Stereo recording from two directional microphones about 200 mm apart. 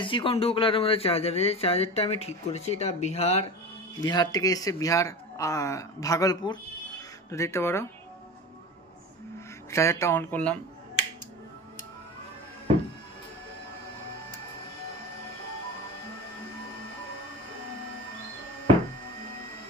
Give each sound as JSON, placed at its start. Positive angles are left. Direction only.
{"t": 0.0, "sound": "speech", "side_deg": 25}
{"t": 4.0, "sound": "speech", "side_deg": 20}
{"t": 9.7, "sound": "speech", "side_deg": 15}